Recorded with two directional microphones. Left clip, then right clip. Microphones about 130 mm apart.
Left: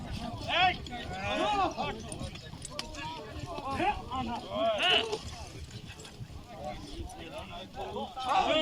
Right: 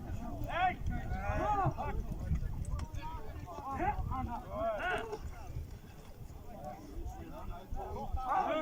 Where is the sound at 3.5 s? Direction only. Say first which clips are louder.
Left 5 dB; 25° left (ahead or behind).